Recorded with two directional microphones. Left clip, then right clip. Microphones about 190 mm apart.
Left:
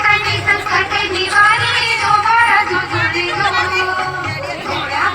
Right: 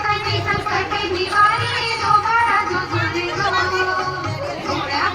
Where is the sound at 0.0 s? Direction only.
40° right (ahead or behind).